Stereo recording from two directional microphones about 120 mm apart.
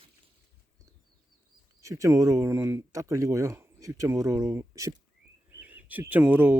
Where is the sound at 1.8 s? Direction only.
25° right (ahead or behind).